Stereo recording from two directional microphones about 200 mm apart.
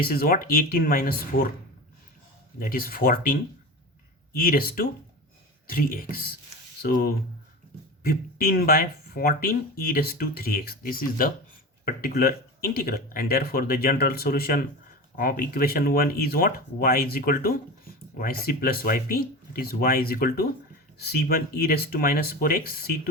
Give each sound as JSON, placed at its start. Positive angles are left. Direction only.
{"t": 0.0, "sound": "speech", "side_deg": 45}
{"t": 2.6, "sound": "speech", "side_deg": 45}
{"t": 4.4, "sound": "speech", "side_deg": 45}